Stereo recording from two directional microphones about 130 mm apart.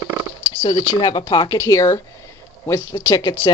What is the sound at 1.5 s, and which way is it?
Speech, 25° left (ahead or behind).